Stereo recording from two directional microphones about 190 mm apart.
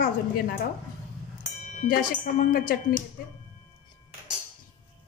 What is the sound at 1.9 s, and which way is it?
Speech, 45° left (ahead or behind).